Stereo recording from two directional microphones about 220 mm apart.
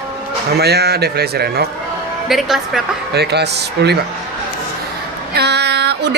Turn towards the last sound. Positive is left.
turn(degrees=-50)  # may be behind; listen again after turning